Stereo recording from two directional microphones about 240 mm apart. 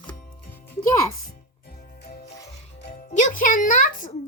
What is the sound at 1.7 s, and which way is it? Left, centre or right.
Music, left.